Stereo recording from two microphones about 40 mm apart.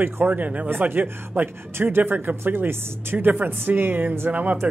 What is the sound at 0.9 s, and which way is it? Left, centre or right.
Speech, right.